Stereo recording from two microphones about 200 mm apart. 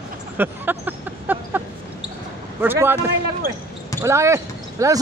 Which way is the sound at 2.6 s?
10° right (ahead or behind).